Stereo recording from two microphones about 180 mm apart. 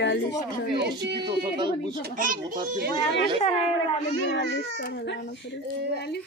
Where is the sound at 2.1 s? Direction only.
50° right (ahead or behind).